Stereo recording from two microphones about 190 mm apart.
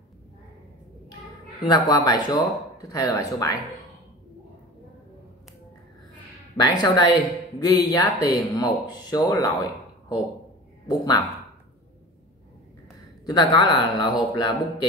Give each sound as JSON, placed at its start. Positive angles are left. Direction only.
{"t": 1.7, "sound": "speech", "side_deg": 20}
{"t": 6.5, "sound": "speech", "side_deg": 20}
{"t": 13.2, "sound": "speech", "side_deg": 20}